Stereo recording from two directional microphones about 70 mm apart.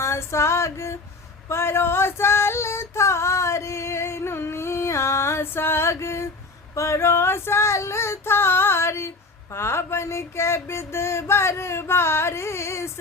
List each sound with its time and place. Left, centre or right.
0.0 s female singing: left